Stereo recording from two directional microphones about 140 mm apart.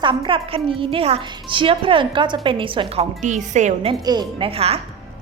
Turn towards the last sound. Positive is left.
turn(degrees=-45)  # may be behind; listen again after turning